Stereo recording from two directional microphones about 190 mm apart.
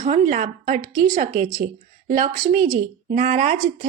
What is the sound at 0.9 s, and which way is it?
Speech, 20° right (ahead or behind).